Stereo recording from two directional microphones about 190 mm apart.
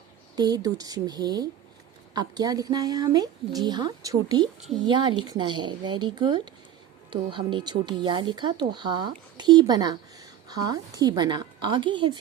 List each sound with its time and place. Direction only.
0.3 s speech: 20° right (ahead or behind)